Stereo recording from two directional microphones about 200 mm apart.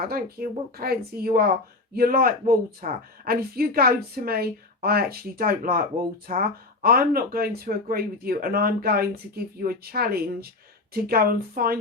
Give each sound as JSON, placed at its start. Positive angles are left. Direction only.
{"t": 0.0, "sound": "speech", "side_deg": -50}